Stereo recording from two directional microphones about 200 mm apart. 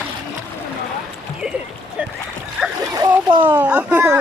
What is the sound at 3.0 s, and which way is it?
Splash, 25° right (ahead or behind).